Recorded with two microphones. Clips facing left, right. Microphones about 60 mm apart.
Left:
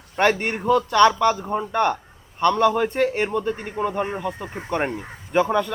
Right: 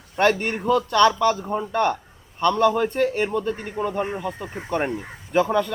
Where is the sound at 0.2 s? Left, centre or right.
Centre.